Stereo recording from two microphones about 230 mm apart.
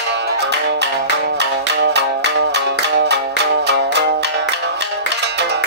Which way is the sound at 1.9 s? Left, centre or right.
Right.